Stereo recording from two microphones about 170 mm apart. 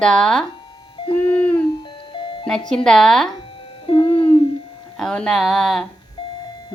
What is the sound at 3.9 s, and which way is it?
Babbling, 30° left (ahead or behind).